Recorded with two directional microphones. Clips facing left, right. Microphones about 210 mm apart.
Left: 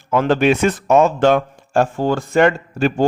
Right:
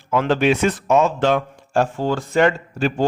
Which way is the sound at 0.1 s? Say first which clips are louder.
Left 2 dB; 45° left (ahead or behind).